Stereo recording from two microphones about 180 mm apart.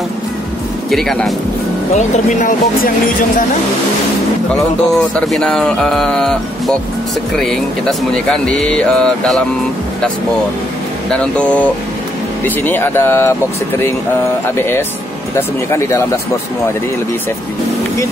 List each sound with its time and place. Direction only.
0.8 s speech: centre (ahead or behind)
2.0 s speech: 45° left (ahead or behind)
4.9 s speech: 5° left (ahead or behind)
11.1 s speech: 5° left (ahead or behind)
14.6 s speech: 10° left (ahead or behind)